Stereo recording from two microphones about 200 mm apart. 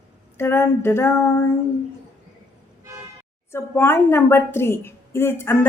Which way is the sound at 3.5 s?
10° left (ahead or behind).